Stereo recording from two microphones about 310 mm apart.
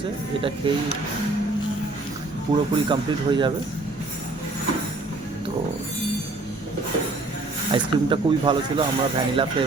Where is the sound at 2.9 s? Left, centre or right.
Centre.